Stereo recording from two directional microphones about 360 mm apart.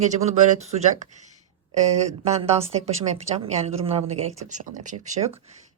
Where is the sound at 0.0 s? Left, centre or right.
Centre.